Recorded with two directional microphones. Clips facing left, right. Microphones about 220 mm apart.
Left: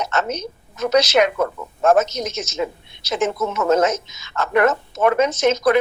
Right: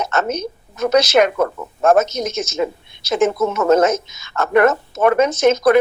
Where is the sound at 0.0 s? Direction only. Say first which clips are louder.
Right 3 dB; 50° right (ahead or behind).